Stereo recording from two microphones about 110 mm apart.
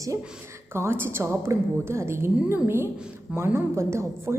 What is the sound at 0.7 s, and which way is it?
A woman's voice, 20° right (ahead or behind).